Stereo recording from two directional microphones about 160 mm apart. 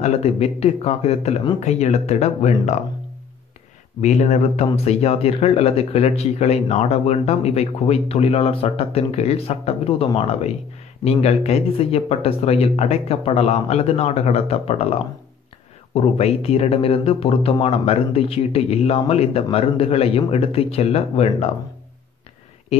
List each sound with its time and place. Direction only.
0.0 s speech: 40° left (ahead or behind)
4.0 s speech: 45° left (ahead or behind)
15.9 s speech: 40° left (ahead or behind)
22.7 s speech: 40° left (ahead or behind)